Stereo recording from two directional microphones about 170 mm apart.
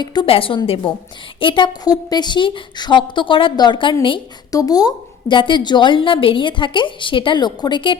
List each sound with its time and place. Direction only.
0.0 s a woman's voice: 25° left (ahead or behind)